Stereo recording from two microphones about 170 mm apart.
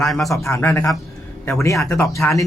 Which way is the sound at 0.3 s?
15° left (ahead or behind).